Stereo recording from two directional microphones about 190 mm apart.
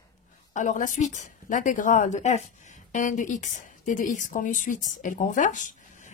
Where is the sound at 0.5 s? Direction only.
40° left (ahead or behind).